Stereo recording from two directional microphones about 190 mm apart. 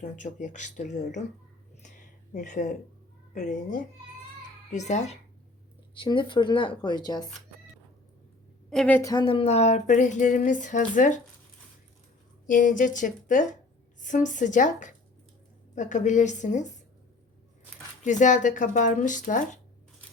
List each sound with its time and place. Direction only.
0.0 s speech: 40° left (ahead or behind)
1.8 s a sound: 40° left (ahead or behind)
3.3 s a child's voice: 40° left (ahead or behind)
6.0 s speech: 25° left (ahead or behind)
8.7 s a woman's voice: centre (ahead or behind)
9.0 s a woman's voice: 15° left (ahead or behind)
9.2 s speech: 30° left (ahead or behind)
12.5 s a woman's voice: 45° left (ahead or behind)
18.0 s speech: 40° left (ahead or behind)